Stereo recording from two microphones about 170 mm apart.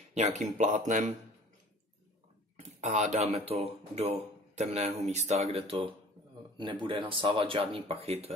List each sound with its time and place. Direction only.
0.1 s speech: 45° right (ahead or behind)
2.8 s speech: 40° right (ahead or behind)